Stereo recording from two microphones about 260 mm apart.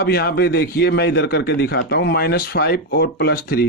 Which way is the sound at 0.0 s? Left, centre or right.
Left.